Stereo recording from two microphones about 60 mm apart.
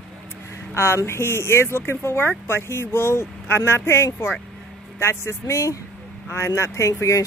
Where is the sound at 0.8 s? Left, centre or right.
Left.